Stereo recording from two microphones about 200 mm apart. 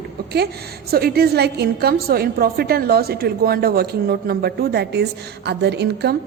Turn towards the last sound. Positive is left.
turn(degrees=-55)  # may be behind; listen again after turning